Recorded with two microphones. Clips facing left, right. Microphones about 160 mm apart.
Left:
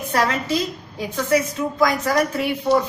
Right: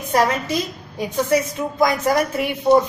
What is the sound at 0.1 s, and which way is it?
A woman's voice, 15° right (ahead or behind).